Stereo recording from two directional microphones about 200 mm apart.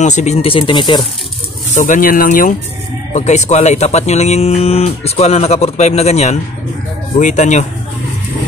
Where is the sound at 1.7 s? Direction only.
40° left (ahead or behind).